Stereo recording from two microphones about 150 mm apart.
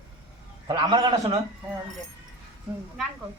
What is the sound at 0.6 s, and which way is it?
Speech, 30° right (ahead or behind).